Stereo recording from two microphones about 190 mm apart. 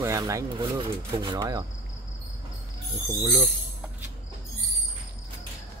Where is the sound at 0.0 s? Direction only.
15° right (ahead or behind).